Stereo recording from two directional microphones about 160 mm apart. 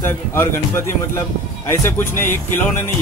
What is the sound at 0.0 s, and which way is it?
Speech, 15° left (ahead or behind).